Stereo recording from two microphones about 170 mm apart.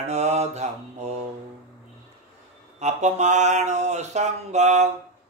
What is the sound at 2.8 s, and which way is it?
Mantra, 45° right (ahead or behind).